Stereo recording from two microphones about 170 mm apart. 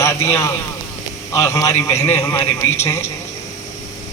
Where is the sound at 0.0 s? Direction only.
15° left (ahead or behind).